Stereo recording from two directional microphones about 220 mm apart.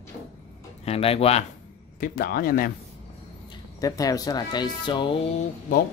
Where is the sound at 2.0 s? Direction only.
40° left (ahead or behind).